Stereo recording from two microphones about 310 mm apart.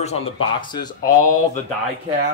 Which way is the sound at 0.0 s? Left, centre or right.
Centre.